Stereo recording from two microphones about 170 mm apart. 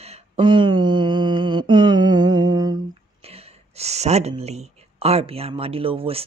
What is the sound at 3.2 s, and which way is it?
Speech, 35° right (ahead or behind).